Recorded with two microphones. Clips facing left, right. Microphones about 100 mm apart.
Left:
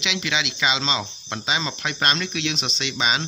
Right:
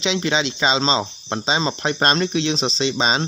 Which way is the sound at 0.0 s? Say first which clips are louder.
Right 6 dB; 35° right (ahead or behind).